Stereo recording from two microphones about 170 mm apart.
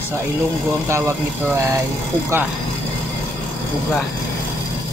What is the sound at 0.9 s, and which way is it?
Speech, 15° right (ahead or behind).